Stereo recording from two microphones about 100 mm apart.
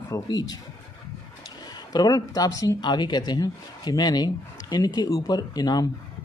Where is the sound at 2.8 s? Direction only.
50° left (ahead or behind).